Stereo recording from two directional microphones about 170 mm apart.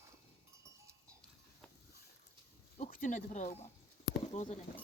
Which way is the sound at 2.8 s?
50° left (ahead or behind).